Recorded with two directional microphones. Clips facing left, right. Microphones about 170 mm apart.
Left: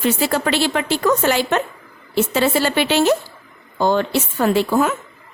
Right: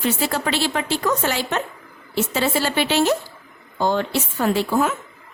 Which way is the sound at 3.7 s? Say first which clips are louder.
Left 3 dB; 75° left (ahead or behind).